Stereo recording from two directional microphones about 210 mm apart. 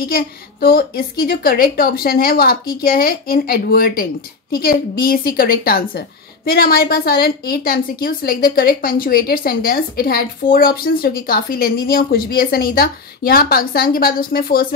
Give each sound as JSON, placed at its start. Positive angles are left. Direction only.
{"t": 0.0, "sound": "a woman's voice", "side_deg": 45}